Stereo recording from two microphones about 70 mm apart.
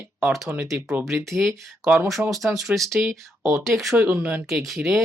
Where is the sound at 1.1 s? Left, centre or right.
Right.